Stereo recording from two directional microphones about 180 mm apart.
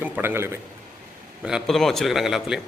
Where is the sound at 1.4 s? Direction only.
Centre (ahead or behind).